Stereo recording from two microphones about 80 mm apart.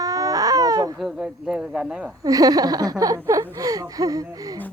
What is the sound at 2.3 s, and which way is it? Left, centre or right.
Speech, right.